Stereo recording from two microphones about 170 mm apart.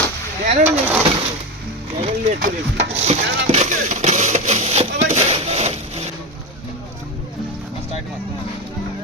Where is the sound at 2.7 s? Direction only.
40° right (ahead or behind).